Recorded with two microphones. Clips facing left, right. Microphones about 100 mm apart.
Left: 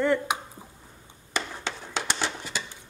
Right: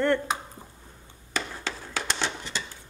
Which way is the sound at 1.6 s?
20° left (ahead or behind).